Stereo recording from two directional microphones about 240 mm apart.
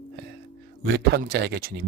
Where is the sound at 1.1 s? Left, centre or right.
Right.